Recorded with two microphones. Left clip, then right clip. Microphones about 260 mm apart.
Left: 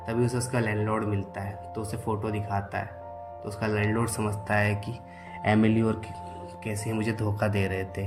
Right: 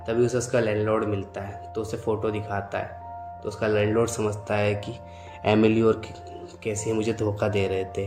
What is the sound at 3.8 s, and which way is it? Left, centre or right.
Speech, left.